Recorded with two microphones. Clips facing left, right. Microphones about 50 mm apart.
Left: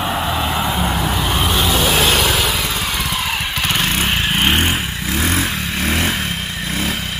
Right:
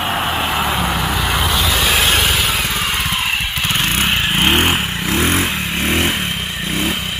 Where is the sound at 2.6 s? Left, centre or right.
Right.